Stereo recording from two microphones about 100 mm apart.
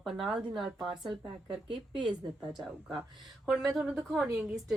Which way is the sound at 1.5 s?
55° right (ahead or behind).